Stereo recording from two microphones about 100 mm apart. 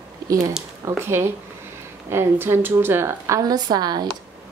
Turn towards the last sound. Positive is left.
turn(degrees=-45)  # may be behind; listen again after turning